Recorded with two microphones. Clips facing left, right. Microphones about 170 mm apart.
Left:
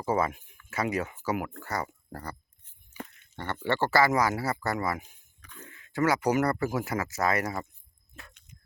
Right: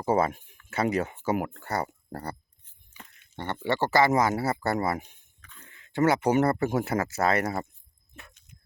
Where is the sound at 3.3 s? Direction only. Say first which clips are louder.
Right 1 dB; 20° right (ahead or behind).